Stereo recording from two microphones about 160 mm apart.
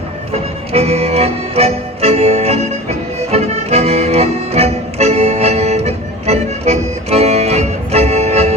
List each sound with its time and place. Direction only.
0.7 s music: 40° right (ahead or behind)